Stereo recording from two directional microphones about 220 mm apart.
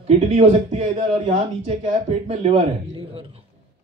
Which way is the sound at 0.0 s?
25° right (ahead or behind).